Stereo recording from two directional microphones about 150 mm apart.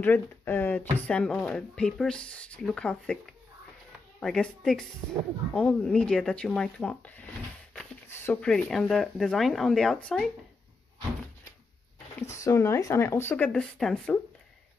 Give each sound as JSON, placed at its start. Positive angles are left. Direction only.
{"t": 0.0, "sound": "speech", "side_deg": 10}
{"t": 4.2, "sound": "speech", "side_deg": 5}
{"t": 12.2, "sound": "speech", "side_deg": 20}